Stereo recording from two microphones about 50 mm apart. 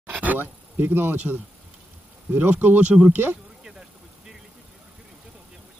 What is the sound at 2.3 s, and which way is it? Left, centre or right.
Speech, right.